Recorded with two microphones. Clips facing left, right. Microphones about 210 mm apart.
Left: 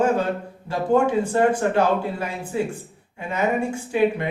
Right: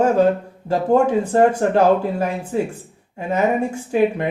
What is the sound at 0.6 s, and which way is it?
Speech, 40° right (ahead or behind).